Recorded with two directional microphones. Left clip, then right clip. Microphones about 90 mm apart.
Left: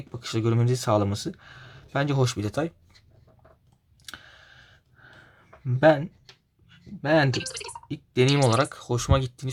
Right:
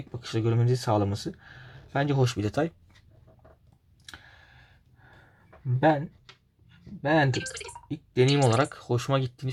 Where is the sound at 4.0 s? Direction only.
30° left (ahead or behind).